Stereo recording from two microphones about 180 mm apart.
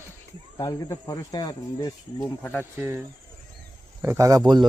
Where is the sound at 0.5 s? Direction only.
20° left (ahead or behind).